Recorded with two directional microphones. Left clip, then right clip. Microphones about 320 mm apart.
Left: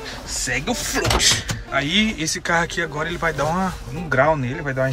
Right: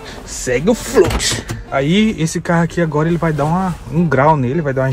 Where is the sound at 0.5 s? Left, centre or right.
Centre.